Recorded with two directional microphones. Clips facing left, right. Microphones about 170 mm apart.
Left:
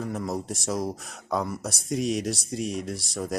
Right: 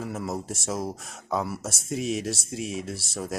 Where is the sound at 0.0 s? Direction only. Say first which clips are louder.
Left 1 dB; centre (ahead or behind).